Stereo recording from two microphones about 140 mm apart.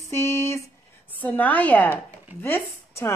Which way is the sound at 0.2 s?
20° left (ahead or behind).